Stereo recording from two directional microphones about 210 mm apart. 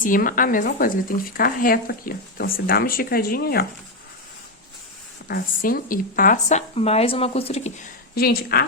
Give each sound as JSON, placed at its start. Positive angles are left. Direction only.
{"t": 0.0, "sound": "speech", "side_deg": 40}
{"t": 5.3, "sound": "speech", "side_deg": 45}
{"t": 8.1, "sound": "speech", "side_deg": 45}